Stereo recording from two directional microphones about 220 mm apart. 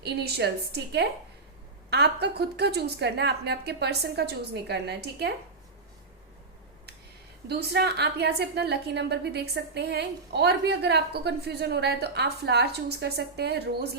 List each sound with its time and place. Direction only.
0.0 s a woman's voice: 50° right (ahead or behind)
7.4 s a woman's voice: 50° right (ahead or behind)